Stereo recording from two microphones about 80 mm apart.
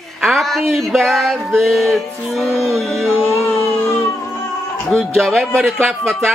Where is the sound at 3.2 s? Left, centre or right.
Left.